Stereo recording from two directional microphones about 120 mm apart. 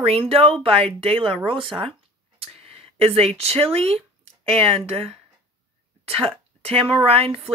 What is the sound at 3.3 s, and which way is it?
Speech, 55° right (ahead or behind).